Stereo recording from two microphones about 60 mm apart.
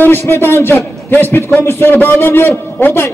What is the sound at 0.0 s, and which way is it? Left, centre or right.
A man's voice, left.